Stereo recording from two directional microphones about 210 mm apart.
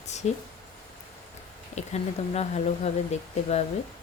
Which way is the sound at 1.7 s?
30° left (ahead or behind).